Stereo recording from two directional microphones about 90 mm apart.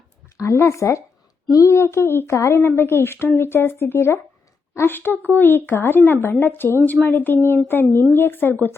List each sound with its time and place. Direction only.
0.3 s speech: 35° left (ahead or behind)